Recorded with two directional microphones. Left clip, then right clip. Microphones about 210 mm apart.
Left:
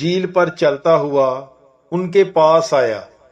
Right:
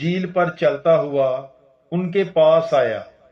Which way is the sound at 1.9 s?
20° left (ahead or behind).